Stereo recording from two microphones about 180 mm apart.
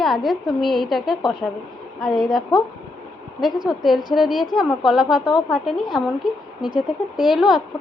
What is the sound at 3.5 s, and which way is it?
A woman's voice, centre (ahead or behind).